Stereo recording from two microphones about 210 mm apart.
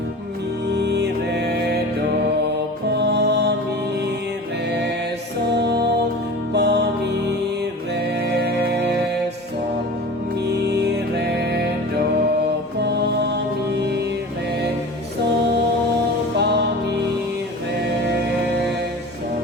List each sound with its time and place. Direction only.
0.7 s music: 55° right (ahead or behind)
2.9 s music: 55° right (ahead or behind)
6.5 s music: 55° right (ahead or behind)
8.3 s music: 50° right (ahead or behind)
12.8 s music: 55° right (ahead or behind)